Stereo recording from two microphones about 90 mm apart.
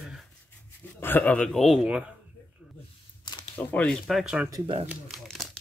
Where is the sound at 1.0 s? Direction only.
20° left (ahead or behind).